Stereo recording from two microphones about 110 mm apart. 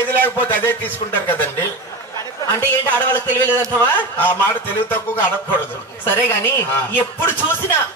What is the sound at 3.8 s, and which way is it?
Music, 20° left (ahead or behind).